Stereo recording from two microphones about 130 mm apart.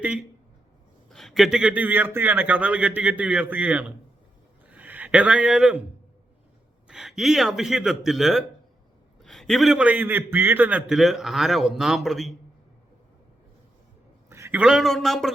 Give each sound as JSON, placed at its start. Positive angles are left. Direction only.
{"t": 0.0, "sound": "a man's voice", "side_deg": -10}
{"t": 1.1, "sound": "a man's voice", "side_deg": 0}
{"t": 6.8, "sound": "a man's voice", "side_deg": -5}
{"t": 14.3, "sound": "a sound", "side_deg": -20}
{"t": 14.6, "sound": "a man's voice", "side_deg": -5}